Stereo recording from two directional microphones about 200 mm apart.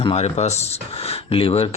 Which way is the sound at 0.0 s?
30° left (ahead or behind).